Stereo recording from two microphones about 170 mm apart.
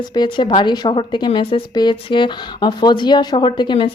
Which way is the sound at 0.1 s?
25° left (ahead or behind).